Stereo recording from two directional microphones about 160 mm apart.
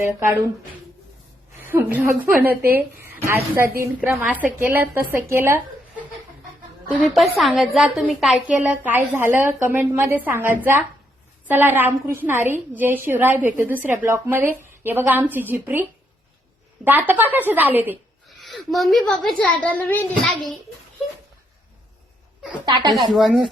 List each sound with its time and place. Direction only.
1.5 s a woman's voice: 15° right (ahead or behind)
6.9 s a woman's voice: 5° right (ahead or behind)
18.3 s a woman's voice: centre (ahead or behind)
20.2 s a woman's voice: centre (ahead or behind)
22.6 s a woman's voice: 25° right (ahead or behind)
23.1 s a woman's voice: centre (ahead or behind)